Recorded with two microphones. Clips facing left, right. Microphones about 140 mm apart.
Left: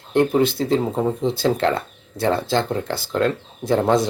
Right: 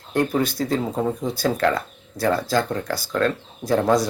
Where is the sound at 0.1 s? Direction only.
25° left (ahead or behind).